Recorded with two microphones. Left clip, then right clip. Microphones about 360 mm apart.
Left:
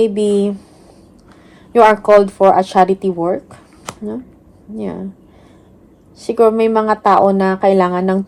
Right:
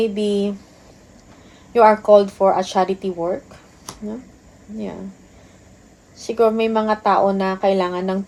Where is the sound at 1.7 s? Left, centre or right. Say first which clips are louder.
Left 3 dB; left.